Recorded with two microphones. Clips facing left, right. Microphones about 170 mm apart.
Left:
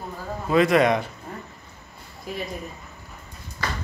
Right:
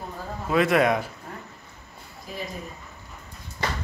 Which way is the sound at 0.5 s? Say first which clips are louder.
Left 2 dB; centre (ahead or behind).